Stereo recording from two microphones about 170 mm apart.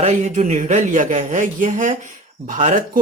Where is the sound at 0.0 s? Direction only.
40° right (ahead or behind).